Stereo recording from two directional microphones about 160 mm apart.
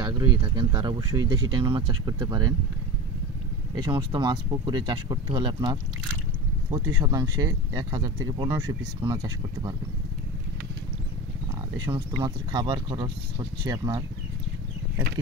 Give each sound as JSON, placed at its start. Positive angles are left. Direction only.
{"t": 0.2, "sound": "speech", "side_deg": -30}
{"t": 3.7, "sound": "speech", "side_deg": -25}
{"t": 11.9, "sound": "speech", "side_deg": -25}